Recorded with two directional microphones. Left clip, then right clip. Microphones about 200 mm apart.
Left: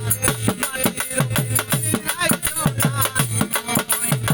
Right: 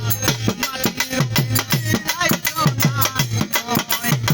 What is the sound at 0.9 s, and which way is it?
Music, 20° right (ahead or behind).